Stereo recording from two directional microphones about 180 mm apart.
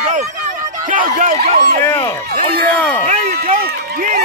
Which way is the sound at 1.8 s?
15° left (ahead or behind).